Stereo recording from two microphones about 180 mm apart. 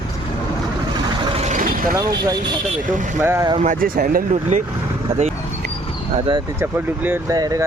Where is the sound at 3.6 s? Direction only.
50° right (ahead or behind).